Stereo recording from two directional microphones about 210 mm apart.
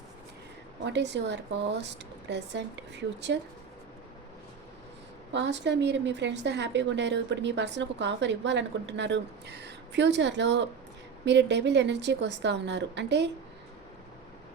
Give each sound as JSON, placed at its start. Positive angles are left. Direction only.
{"t": 0.9, "sound": "a woman's voice", "side_deg": -55}
{"t": 5.3, "sound": "a woman's voice", "side_deg": -55}